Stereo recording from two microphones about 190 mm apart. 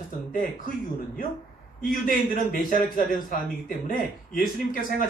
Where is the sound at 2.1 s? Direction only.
45° left (ahead or behind).